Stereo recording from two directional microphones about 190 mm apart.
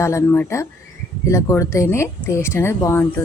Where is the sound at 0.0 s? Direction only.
15° left (ahead or behind).